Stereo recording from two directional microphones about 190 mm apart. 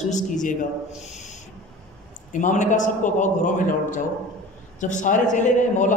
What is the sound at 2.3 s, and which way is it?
A man's voice, 40° left (ahead or behind).